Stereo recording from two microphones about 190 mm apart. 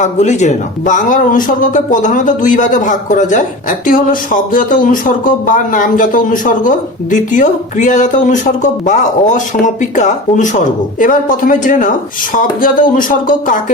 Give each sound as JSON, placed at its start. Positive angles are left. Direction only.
{"t": 0.0, "sound": "speech", "side_deg": 40}